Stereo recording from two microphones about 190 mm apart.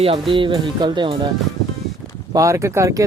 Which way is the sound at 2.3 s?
15° right (ahead or behind).